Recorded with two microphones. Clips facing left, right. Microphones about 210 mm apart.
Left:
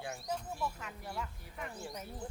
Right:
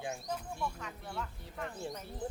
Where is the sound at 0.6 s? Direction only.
5° left (ahead or behind).